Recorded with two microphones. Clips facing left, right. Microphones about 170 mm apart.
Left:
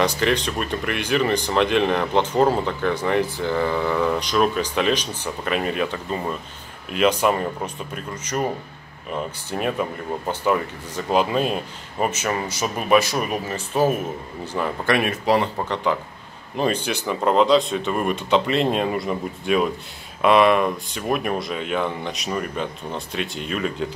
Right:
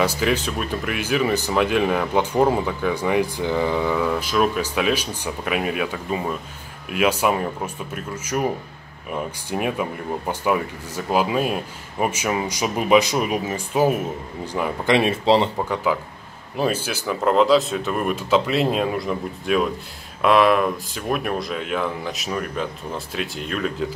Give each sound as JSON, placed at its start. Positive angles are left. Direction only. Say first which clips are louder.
{"t": 0.0, "sound": "speech", "louder": "even", "side_deg": -5}
{"t": 15.0, "sound": "speech", "louder": "right 4 dB", "side_deg": -25}
{"t": 15.5, "sound": "speech", "louder": "right 1 dB", "side_deg": -5}